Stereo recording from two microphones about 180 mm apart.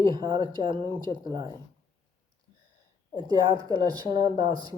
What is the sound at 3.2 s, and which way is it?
Speech, 25° right (ahead or behind).